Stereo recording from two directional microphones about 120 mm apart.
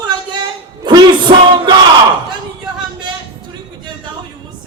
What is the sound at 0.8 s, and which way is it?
Music, 35° right (ahead or behind).